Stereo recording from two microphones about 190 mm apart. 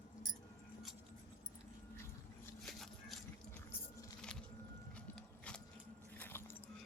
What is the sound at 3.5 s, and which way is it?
Squish, 15° left (ahead or behind).